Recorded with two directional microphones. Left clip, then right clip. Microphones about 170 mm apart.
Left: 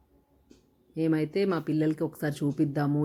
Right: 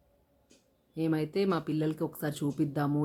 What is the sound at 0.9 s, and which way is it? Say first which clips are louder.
Speech: left 4 dB; 15° left (ahead or behind).